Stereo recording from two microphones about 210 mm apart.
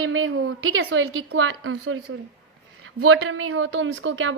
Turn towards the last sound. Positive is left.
turn(degrees=-65)  # may be behind; listen again after turning